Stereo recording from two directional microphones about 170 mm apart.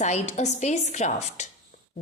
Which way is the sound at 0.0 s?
40° left (ahead or behind).